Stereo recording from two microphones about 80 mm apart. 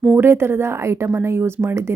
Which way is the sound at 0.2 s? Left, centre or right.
Right.